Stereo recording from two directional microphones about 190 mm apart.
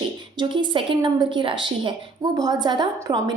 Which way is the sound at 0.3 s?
25° right (ahead or behind).